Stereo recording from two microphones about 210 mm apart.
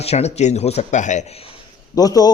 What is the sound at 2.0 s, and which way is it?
Speech, 15° left (ahead or behind).